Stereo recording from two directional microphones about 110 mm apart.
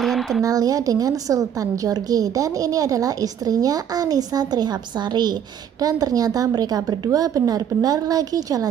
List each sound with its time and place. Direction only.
0.0 s a sound: centre (ahead or behind)
0.4 s a woman's voice: 35° right (ahead or behind)
5.8 s a woman's voice: 35° right (ahead or behind)